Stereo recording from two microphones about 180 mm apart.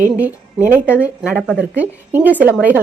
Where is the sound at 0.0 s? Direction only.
10° right (ahead or behind).